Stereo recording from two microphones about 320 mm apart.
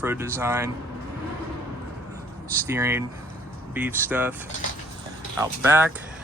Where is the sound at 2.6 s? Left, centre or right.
Centre.